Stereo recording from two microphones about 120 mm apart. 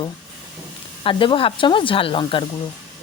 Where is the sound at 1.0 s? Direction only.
45° left (ahead or behind).